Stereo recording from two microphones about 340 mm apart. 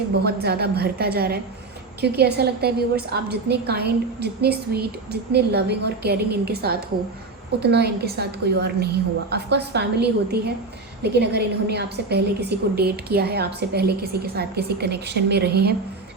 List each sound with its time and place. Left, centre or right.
0.3 s a woman's voice: right